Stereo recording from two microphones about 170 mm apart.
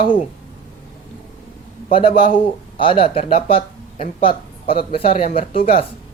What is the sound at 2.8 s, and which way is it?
Speech, 30° left (ahead or behind).